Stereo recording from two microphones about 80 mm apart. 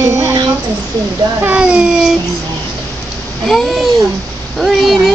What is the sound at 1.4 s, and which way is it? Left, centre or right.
Speech, centre.